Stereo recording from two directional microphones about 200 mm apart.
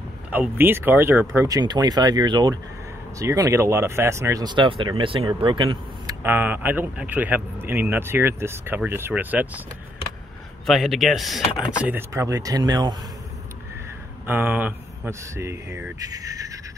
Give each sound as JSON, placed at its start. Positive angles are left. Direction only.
{"t": 0.3, "sound": "speech", "side_deg": -10}
{"t": 6.2, "sound": "speech", "side_deg": -10}
{"t": 10.7, "sound": "speech", "side_deg": 0}
{"t": 11.8, "sound": "speech", "side_deg": -10}
{"t": 14.2, "sound": "speech", "side_deg": -10}